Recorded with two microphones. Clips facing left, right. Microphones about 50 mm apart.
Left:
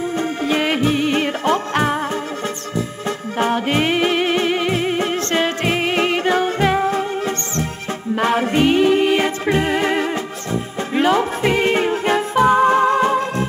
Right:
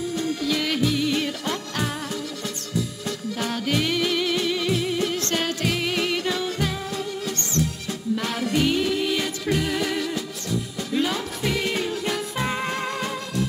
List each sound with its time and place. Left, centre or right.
0.1 s music: left
3.3 s music: left